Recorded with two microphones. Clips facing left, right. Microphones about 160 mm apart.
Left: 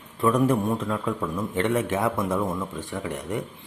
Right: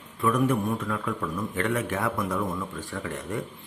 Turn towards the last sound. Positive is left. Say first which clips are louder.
# left 2 dB
turn(degrees=20)  # may be behind; listen again after turning